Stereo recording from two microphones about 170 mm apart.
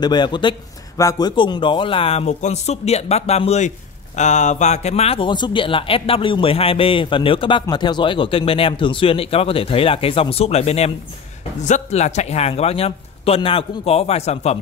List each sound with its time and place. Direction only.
0.0 s speech: 25° left (ahead or behind)